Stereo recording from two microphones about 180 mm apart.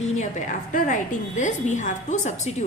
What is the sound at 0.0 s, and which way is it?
A woman's voice, 40° left (ahead or behind).